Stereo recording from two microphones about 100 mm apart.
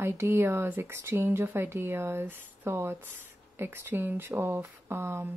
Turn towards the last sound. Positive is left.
turn(degrees=-25)  # may be behind; listen again after turning